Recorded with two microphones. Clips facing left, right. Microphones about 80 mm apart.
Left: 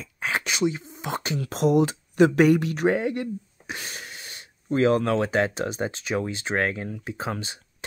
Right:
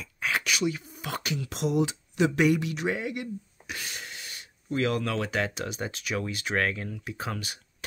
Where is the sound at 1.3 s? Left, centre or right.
Left.